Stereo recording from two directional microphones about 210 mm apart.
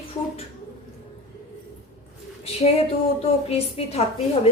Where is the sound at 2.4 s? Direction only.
30° left (ahead or behind).